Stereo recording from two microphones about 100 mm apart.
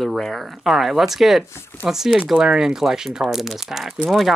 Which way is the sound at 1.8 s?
5° right (ahead or behind).